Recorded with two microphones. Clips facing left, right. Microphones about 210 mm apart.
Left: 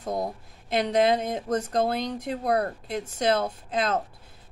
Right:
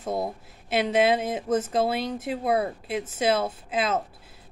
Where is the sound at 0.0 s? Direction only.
5° right (ahead or behind).